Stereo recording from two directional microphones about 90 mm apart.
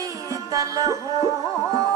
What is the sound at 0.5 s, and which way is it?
Music, 40° right (ahead or behind).